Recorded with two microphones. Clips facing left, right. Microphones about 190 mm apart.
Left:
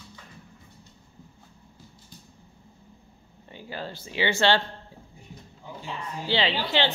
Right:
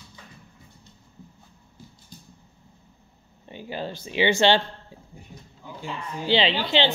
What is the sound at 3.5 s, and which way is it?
Speech, 20° right (ahead or behind).